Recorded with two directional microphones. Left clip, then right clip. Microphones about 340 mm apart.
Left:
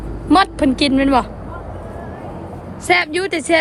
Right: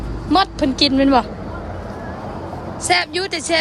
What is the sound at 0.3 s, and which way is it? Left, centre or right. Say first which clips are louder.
Speech: left 3 dB; centre.